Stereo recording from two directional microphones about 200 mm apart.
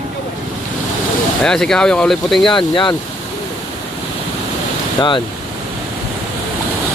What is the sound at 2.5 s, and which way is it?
Speech, 25° left (ahead or behind).